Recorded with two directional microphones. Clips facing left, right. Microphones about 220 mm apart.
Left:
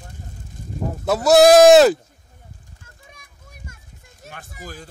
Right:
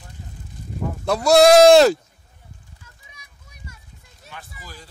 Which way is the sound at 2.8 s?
50° left (ahead or behind).